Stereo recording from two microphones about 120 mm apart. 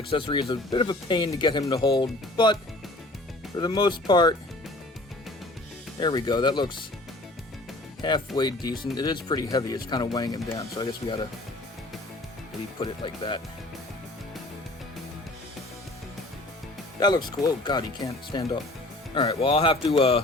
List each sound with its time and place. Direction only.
0.1 s speech: 45° left (ahead or behind)
3.6 s speech: 35° left (ahead or behind)
6.0 s speech: 35° left (ahead or behind)
8.0 s speech: 40° left (ahead or behind)
12.8 s speech: 40° left (ahead or behind)
17.0 s speech: 35° left (ahead or behind)
19.1 s speech: 50° left (ahead or behind)